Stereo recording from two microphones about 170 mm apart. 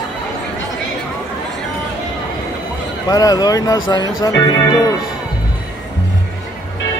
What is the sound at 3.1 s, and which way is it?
Speech, 20° left (ahead or behind).